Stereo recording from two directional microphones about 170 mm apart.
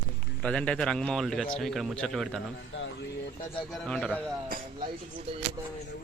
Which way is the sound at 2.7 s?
90° left.